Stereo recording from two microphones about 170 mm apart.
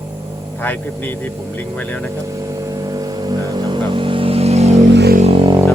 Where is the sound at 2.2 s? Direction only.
20° right (ahead or behind); by 4.7 s 40° right (ahead or behind).